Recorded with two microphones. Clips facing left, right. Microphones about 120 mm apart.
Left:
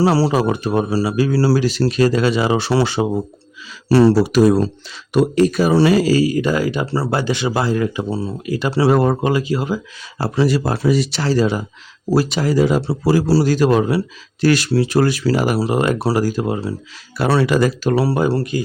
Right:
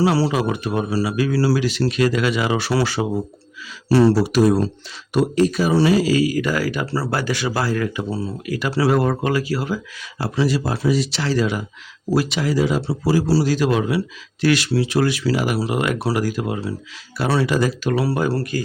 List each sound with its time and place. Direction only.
0.0 s speech: 35° left (ahead or behind)
3.8 s speech: 75° left (ahead or behind)
5.3 s speech: 60° left (ahead or behind)
6.1 s speech: 30° left (ahead or behind)
10.2 s speech: 40° left (ahead or behind)
10.4 s speech: 55° left (ahead or behind)
11.2 s speech: 35° left (ahead or behind)
17.2 s speech: 65° left (ahead or behind)
17.8 s speech: 30° left (ahead or behind)